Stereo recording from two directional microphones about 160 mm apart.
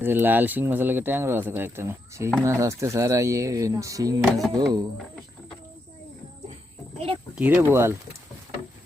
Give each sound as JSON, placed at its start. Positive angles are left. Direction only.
{"t": 0.0, "sound": "speech", "side_deg": -15}
{"t": 4.2, "sound": "music", "side_deg": 0}
{"t": 7.3, "sound": "speech", "side_deg": -10}